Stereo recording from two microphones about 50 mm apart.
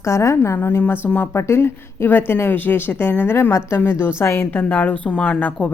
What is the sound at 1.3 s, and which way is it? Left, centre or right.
A woman's voice, left.